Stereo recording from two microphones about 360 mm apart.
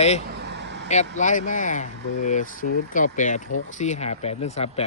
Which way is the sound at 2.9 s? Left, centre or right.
Left.